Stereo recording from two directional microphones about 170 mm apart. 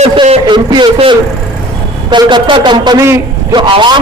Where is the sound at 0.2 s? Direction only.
25° right (ahead or behind).